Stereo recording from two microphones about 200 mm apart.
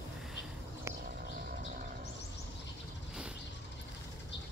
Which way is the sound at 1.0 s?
45° right (ahead or behind).